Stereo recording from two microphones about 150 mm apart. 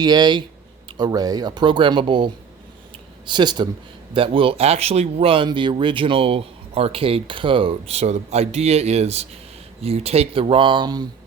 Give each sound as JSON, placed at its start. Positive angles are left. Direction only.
{"t": 0.0, "sound": "speech", "side_deg": -30}